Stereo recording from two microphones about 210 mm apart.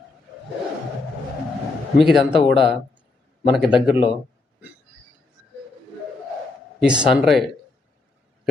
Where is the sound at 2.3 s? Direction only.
25° left (ahead or behind).